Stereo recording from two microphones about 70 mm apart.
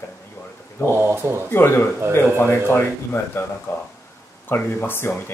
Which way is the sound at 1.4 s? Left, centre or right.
Left.